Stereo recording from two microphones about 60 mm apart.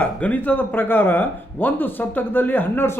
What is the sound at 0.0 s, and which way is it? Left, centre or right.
Speech, left.